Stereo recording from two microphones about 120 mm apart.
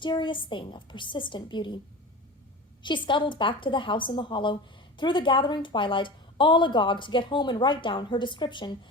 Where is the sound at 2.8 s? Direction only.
40° left (ahead or behind).